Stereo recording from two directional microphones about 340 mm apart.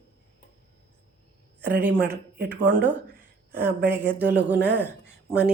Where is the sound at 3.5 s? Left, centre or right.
Centre.